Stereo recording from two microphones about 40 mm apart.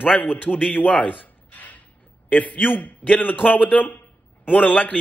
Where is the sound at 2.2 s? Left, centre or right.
Left.